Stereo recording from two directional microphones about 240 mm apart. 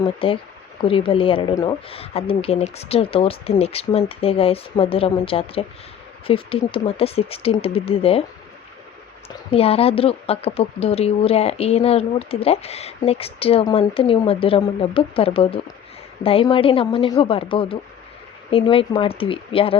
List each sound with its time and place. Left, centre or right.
0.2 s a woman's voice: left
9.3 s a woman's voice: left